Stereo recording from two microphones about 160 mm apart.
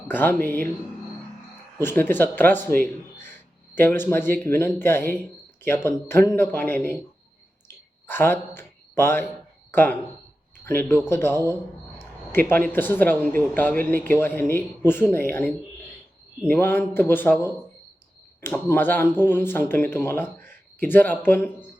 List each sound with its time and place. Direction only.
0.1 s speech: 10° left (ahead or behind)
1.8 s speech: 15° left (ahead or behind)
8.0 s speech: 10° left (ahead or behind)
18.3 s speech: 15° left (ahead or behind)